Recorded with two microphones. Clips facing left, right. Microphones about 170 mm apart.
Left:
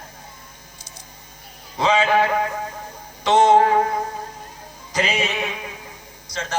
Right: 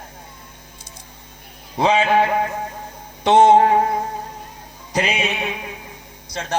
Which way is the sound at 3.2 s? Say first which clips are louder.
Right 3 dB; 60° right (ahead or behind).